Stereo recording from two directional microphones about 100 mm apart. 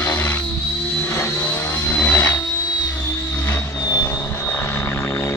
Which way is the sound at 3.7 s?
35° left (ahead or behind).